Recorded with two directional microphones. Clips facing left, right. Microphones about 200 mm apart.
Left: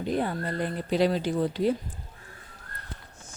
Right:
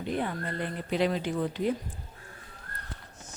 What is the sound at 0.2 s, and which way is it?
Speech, 35° left (ahead or behind).